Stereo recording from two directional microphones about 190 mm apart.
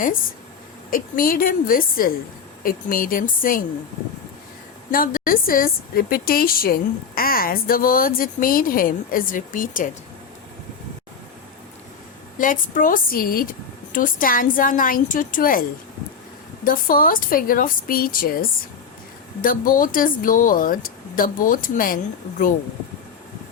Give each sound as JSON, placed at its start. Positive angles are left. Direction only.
{"t": 0.9, "sound": "a woman's voice", "side_deg": 45}
{"t": 4.9, "sound": "a woman's voice", "side_deg": 45}
{"t": 12.4, "sound": "a woman's voice", "side_deg": 45}
{"t": 16.6, "sound": "a woman's voice", "side_deg": 45}